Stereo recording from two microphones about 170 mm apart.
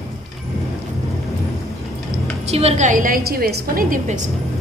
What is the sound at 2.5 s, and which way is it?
A woman's voice, 40° right (ahead or behind).